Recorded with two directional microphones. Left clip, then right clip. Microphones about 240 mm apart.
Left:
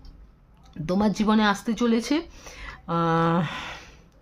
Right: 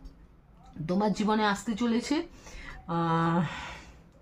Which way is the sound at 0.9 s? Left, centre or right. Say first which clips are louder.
Left 4 dB; left.